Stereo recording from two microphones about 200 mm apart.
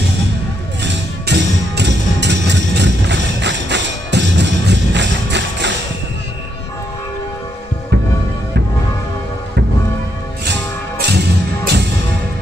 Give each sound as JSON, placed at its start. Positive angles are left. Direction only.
{"t": 0.8, "sound": "music", "side_deg": -55}
{"t": 10.4, "sound": "music", "side_deg": -60}